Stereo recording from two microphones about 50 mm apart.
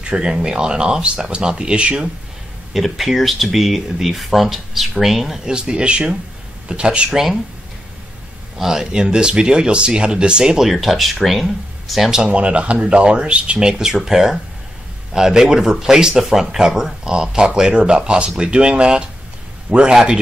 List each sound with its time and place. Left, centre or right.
0.0 s speech: centre
2.7 s speech: centre
5.4 s speech: centre
7.1 s speech: centre
8.5 s speech: centre
10.7 s speech: centre
12.3 s speech: right